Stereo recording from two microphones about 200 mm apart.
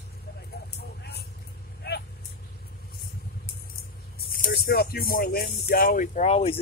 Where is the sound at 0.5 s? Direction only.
55° left (ahead or behind).